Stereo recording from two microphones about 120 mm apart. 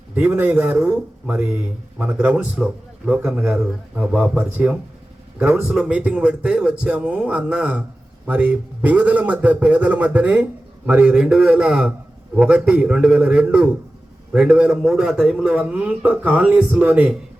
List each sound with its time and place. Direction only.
0.1 s a man's voice: 15° right (ahead or behind)